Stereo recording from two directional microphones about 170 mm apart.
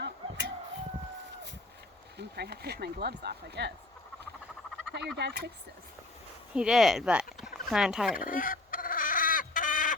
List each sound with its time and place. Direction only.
0.0 s a sound: 75° right (ahead or behind)
2.1 s speech: 70° right (ahead or behind)
5.1 s speech: 75° right (ahead or behind)
6.5 s speech: 5° right (ahead or behind)
7.3 s a sound: 5° right (ahead or behind)
8.2 s chicken: 55° left (ahead or behind)